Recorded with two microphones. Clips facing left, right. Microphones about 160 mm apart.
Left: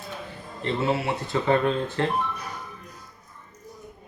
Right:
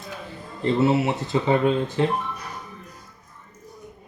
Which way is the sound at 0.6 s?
25° right (ahead or behind).